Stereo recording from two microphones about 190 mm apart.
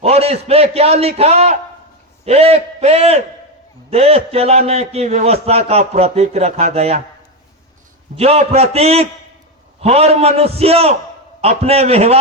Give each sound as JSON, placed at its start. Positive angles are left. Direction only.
{"t": 0.0, "sound": "a man's voice", "side_deg": -30}
{"t": 8.1, "sound": "a man's voice", "side_deg": -35}